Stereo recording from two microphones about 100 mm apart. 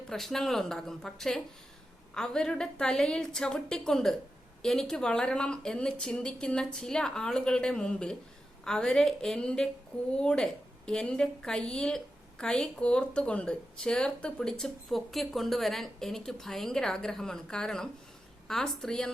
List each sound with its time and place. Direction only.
0.1 s a woman's voice: 5° left (ahead or behind)